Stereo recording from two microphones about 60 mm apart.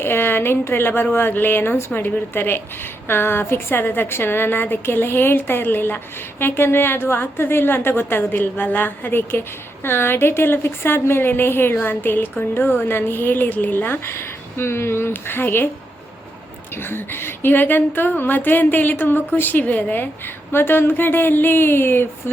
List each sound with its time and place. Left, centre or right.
0.0 s a woman's voice: left
16.7 s a woman's voice: left